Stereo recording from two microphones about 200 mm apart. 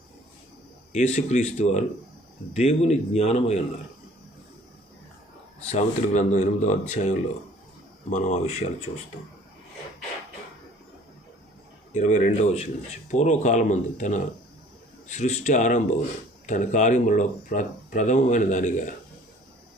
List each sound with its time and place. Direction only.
0.9 s speech: 35° left (ahead or behind)
5.6 s speech: 35° left (ahead or behind)
11.9 s speech: 35° left (ahead or behind)